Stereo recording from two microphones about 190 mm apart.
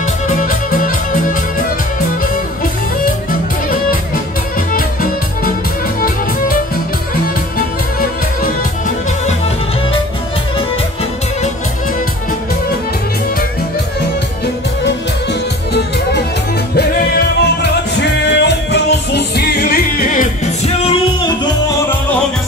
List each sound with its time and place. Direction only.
0.3 s music: 45° left (ahead or behind)
3.3 s music: 50° left (ahead or behind)
15.7 s music: 60° left (ahead or behind); by 21.0 s 35° left (ahead or behind)